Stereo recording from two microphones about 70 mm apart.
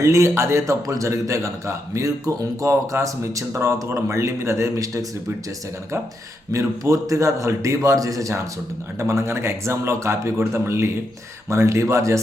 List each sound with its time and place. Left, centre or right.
0.0 s a man's voice: right
6.5 s a man's voice: right